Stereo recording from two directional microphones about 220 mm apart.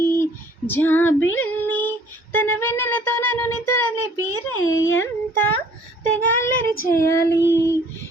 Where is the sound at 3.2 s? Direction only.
90° left.